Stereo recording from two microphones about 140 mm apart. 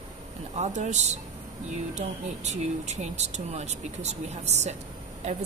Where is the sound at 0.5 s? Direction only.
55° right (ahead or behind).